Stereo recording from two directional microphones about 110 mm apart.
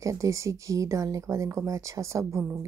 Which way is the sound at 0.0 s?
30° right (ahead or behind).